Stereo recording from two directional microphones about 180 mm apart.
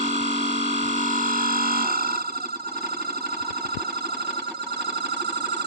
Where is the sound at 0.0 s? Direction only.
40° right (ahead or behind).